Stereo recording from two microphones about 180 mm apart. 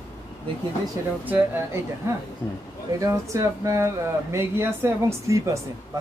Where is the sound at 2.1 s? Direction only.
15° right (ahead or behind).